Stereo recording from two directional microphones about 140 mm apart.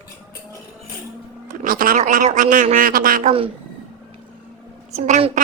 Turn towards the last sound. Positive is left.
turn(degrees=-50)  # may be behind; listen again after turning